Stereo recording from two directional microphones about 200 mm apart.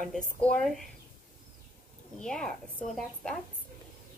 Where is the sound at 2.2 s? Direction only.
5° left (ahead or behind).